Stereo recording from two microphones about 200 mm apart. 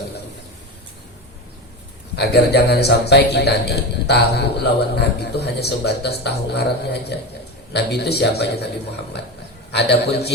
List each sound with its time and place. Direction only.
2.1 s a man's voice: 55° left (ahead or behind)
9.7 s a man's voice: 55° left (ahead or behind)